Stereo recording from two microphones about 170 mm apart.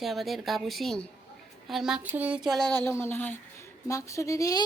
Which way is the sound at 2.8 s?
15° left (ahead or behind).